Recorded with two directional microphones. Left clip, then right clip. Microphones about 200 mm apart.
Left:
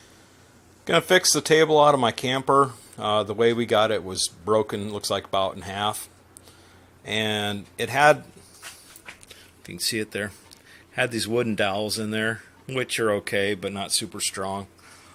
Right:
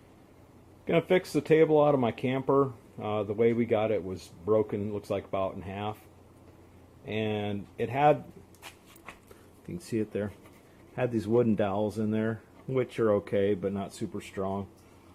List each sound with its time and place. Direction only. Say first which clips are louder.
0.9 s speech: left 7 dB; 15° left (ahead or behind)
7.0 s speech: left 7 dB; 15° left (ahead or behind)
9.9 s speech: right 1 dB; 10° left (ahead or behind)